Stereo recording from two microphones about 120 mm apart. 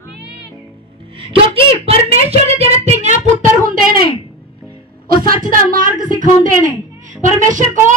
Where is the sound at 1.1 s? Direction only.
50° right (ahead or behind); by 3.2 s 65° right (ahead or behind).